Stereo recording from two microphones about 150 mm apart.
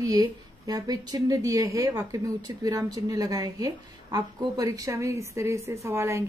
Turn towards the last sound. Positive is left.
turn(degrees=-20)  # may be behind; listen again after turning